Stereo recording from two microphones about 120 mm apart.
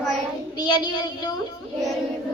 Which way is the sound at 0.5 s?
35° left (ahead or behind).